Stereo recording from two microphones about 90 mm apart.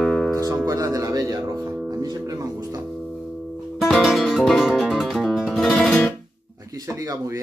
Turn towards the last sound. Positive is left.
turn(degrees=-40)  # may be behind; listen again after turning